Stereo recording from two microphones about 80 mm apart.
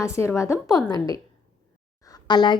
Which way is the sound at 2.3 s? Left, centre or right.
Left.